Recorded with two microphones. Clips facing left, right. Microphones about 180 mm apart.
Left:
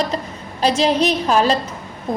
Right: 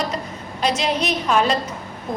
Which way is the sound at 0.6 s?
30° left (ahead or behind).